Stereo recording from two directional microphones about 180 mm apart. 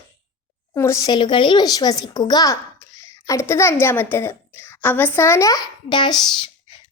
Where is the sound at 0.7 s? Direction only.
15° left (ahead or behind).